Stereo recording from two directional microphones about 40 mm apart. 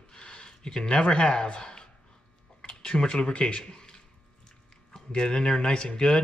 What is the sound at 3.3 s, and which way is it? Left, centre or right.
Speech, left.